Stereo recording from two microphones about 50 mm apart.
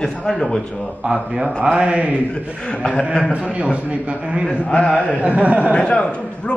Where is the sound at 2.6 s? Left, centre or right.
Left.